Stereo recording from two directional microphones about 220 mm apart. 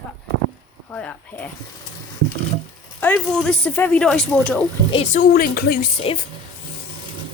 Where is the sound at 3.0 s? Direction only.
5° left (ahead or behind).